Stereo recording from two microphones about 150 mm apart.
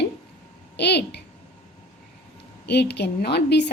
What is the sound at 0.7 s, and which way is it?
Speech, 90° left.